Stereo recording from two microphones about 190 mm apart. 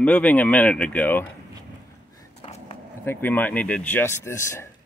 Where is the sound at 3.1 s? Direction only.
10° left (ahead or behind).